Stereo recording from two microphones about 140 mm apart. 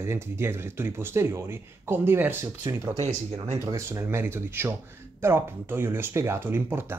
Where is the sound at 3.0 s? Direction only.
50° right (ahead or behind).